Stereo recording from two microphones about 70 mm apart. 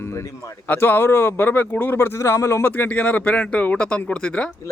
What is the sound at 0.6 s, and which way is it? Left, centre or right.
A man's voice, left.